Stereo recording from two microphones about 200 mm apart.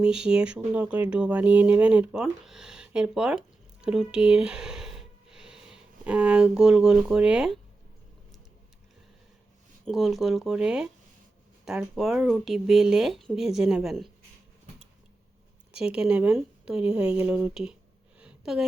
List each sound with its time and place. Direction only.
0.0 s speech: 5° right (ahead or behind)
9.8 s speech: centre (ahead or behind)
15.7 s speech: 5° right (ahead or behind)
18.2 s a sound: 5° right (ahead or behind)